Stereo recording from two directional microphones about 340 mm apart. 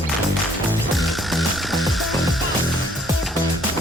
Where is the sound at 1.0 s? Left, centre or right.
Centre.